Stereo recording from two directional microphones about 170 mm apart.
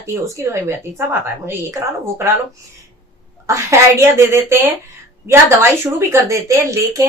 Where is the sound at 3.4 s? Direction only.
15° right (ahead or behind).